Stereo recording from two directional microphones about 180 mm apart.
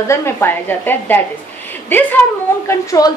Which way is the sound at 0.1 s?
15° left (ahead or behind).